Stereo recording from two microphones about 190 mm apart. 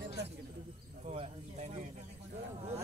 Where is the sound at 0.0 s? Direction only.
60° right (ahead or behind).